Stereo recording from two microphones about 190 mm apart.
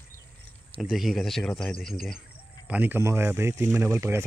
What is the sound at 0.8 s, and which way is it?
Speech, centre (ahead or behind).